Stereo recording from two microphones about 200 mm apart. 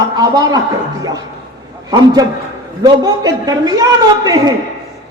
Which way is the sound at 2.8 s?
20° right (ahead or behind).